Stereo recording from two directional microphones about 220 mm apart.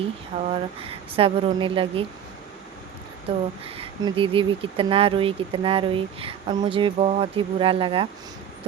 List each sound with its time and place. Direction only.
0.3 s speech: 30° right (ahead or behind)
3.8 s speech: 25° right (ahead or behind)